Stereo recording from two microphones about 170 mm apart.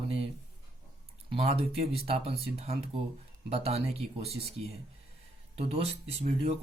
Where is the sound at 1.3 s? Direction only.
35° right (ahead or behind).